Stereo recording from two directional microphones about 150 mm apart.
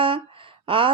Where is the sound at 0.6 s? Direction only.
35° right (ahead or behind).